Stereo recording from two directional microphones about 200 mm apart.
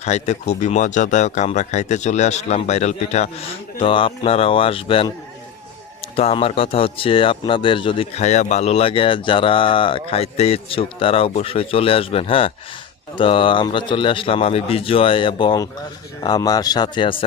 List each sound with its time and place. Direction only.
0.0 s speech: 35° left (ahead or behind)
6.1 s speech: 30° left (ahead or behind)